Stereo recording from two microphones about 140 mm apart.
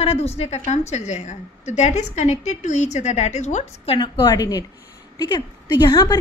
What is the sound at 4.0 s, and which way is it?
A woman's voice, 30° left (ahead or behind).